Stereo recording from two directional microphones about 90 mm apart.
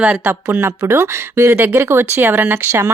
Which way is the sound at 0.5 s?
30° right (ahead or behind).